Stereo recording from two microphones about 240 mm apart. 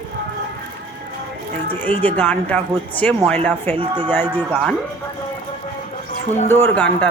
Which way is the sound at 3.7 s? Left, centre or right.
Centre.